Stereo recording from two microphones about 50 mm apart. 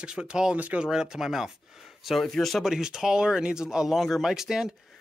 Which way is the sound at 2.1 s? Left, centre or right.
Centre.